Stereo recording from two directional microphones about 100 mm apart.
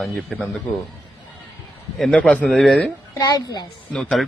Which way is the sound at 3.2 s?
40° left (ahead or behind).